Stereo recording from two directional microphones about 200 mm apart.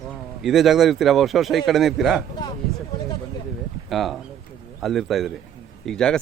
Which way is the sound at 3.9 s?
Centre (ahead or behind).